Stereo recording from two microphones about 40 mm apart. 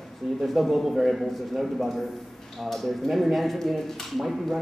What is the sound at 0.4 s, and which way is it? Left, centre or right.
Speech, centre.